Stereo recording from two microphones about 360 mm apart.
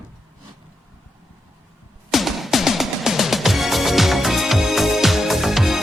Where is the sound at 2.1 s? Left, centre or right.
Centre.